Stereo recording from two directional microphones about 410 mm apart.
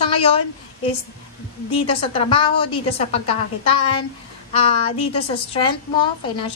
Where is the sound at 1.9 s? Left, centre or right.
Centre.